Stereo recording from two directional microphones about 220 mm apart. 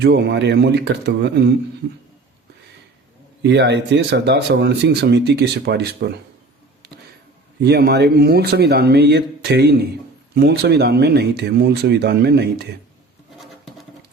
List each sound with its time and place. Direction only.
0.0 s speech: 50° right (ahead or behind)
3.4 s speech: 50° right (ahead or behind)
7.6 s speech: 45° right (ahead or behind)
13.4 s bird: centre (ahead or behind)